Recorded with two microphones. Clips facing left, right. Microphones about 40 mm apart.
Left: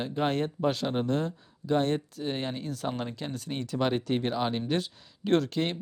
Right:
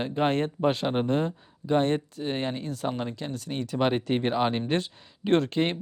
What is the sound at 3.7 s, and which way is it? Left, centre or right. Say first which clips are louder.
Speech: right 3 dB; right.